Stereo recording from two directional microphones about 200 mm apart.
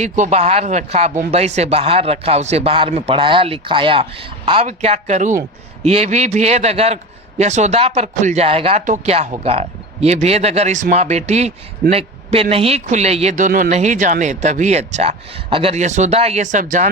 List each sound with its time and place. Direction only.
0.0 s a man's voice: 35° right (ahead or behind)